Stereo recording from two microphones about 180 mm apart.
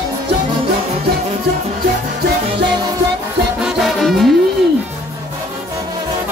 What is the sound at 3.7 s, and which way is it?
Music, centre (ahead or behind).